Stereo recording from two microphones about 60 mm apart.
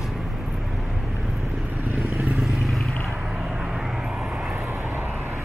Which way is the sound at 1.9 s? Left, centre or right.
Right.